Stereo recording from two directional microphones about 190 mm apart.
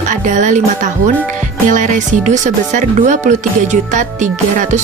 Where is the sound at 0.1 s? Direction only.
40° right (ahead or behind).